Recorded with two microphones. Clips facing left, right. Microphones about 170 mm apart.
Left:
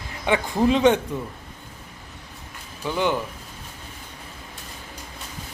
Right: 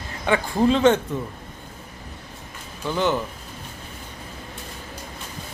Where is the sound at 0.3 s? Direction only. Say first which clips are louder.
Right 1 dB; 15° left (ahead or behind).